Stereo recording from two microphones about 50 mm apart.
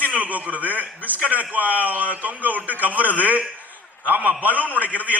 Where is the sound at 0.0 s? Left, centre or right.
Right.